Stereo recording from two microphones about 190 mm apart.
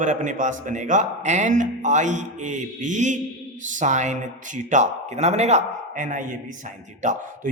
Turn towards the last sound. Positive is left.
turn(degrees=-40)  # may be behind; listen again after turning